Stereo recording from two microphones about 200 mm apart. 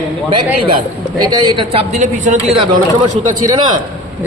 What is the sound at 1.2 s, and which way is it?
A man's voice, 20° right (ahead or behind).